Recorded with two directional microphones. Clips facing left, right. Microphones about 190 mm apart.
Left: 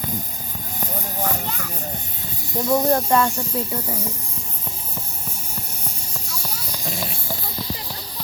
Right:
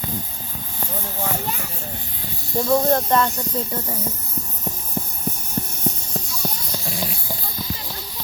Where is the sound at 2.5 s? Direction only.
20° left (ahead or behind).